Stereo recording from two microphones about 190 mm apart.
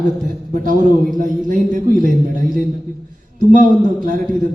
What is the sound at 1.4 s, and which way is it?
Speech, 45° right (ahead or behind).